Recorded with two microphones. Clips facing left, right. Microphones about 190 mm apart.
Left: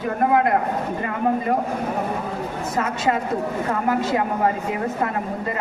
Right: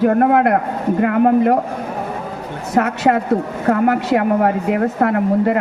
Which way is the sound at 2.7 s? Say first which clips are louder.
Right 8 dB; 70° right (ahead or behind).